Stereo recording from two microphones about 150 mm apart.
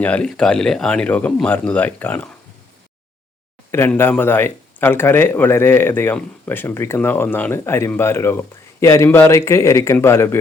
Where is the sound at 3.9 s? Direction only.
15° left (ahead or behind).